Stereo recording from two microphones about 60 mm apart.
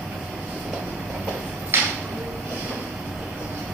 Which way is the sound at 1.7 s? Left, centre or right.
Right.